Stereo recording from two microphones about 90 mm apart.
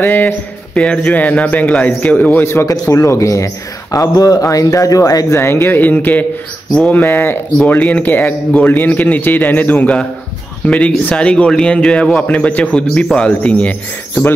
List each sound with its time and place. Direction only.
0.0 s a man's voice: 25° left (ahead or behind); by 5.4 s 40° left (ahead or behind)
5.4 s a man's voice: 25° left (ahead or behind)
6.7 s speech: 10° left (ahead or behind)
7.0 s a man's voice: 25° left (ahead or behind)
11.1 s speech: 15° left (ahead or behind)